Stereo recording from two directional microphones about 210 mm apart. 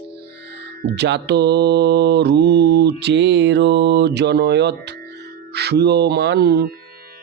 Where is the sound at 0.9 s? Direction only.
55° right (ahead or behind).